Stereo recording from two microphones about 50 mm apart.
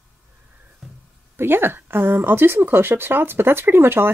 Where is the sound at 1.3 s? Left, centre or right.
Right.